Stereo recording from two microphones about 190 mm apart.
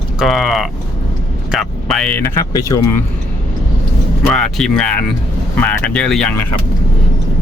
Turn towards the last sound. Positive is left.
turn(degrees=5)  # may be behind; listen again after turning